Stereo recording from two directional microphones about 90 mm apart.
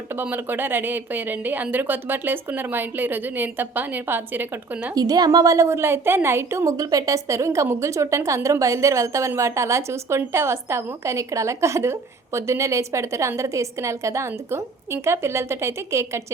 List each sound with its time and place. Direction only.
0.1 s speech: 25° right (ahead or behind)
4.9 s a woman's voice: 45° right (ahead or behind)